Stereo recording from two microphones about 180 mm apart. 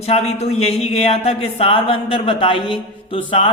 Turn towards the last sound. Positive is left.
turn(degrees=30)  # may be behind; listen again after turning